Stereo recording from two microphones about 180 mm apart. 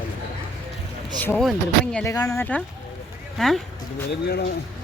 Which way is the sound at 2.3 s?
5° left (ahead or behind).